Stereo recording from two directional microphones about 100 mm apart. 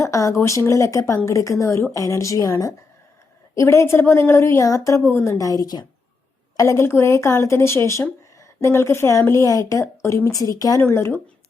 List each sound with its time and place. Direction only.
0.0 s a woman's voice: 30° left (ahead or behind)
6.6 s a woman's voice: 30° left (ahead or behind)
10.8 s a woman's voice: 25° left (ahead or behind)